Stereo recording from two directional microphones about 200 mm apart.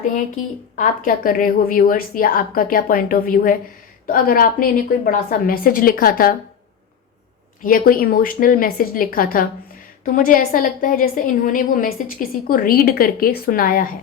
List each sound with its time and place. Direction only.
0.8 s a woman's voice: 45° left (ahead or behind)
7.6 s a woman's voice: 45° left (ahead or behind)